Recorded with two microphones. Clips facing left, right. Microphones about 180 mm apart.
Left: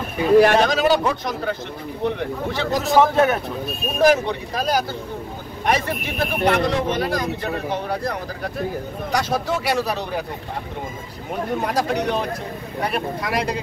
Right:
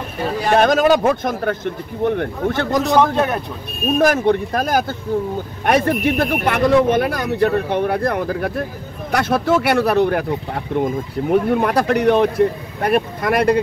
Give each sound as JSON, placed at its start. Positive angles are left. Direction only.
{"t": 0.6, "sound": "a man's voice", "side_deg": -50}
{"t": 2.8, "sound": "a man's voice", "side_deg": 0}
{"t": 4.0, "sound": "a man's voice", "side_deg": -50}